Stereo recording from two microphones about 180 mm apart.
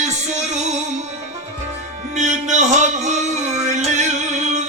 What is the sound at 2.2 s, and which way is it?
Music, 40° right (ahead or behind).